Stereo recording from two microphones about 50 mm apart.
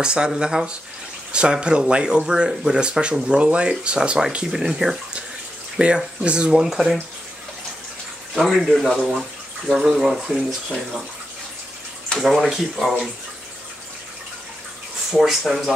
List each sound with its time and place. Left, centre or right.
0.0 s speech: centre
4.5 s speech: centre
5.8 s speech: right
6.7 s speech: centre
8.4 s speech: centre
9.8 s speech: centre
12.2 s speech: centre
15.0 s speech: centre